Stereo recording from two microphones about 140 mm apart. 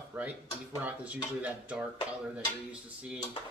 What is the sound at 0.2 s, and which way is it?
Speech, 10° right (ahead or behind).